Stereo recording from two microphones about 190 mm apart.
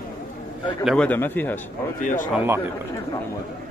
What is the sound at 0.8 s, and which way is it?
Speech, 5° left (ahead or behind).